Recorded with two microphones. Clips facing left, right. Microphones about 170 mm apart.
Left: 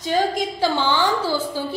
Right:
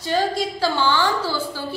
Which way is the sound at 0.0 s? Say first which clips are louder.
Left 1 dB; 15° left (ahead or behind).